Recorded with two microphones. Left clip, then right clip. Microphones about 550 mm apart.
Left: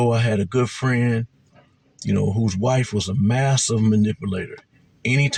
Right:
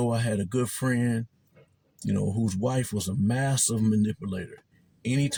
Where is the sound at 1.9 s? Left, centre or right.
Right.